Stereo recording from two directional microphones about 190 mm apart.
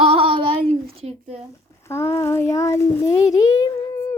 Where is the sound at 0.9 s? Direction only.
30° right (ahead or behind).